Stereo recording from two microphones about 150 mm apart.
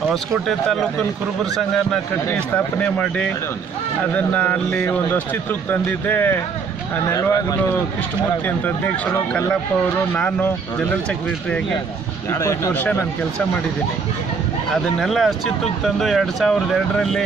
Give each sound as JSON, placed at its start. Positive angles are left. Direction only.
{"t": 0.1, "sound": "speech", "side_deg": 0}
{"t": 8.5, "sound": "speech", "side_deg": 10}
{"t": 10.1, "sound": "speech", "side_deg": 10}
{"t": 12.3, "sound": "speech", "side_deg": 20}
{"t": 15.0, "sound": "speech", "side_deg": 0}